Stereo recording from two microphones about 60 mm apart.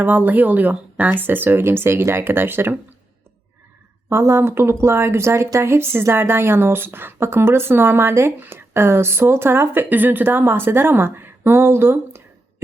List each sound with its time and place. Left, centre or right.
0.0 s speech: right
4.1 s speech: right